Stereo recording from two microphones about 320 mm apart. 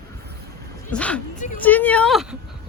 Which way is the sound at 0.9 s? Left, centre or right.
Centre.